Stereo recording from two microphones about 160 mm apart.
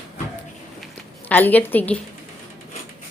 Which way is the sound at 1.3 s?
10° left (ahead or behind).